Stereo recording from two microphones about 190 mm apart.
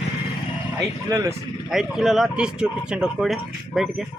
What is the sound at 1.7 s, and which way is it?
Speech, centre (ahead or behind).